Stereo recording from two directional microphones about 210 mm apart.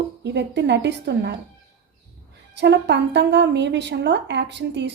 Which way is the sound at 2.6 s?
55° right (ahead or behind).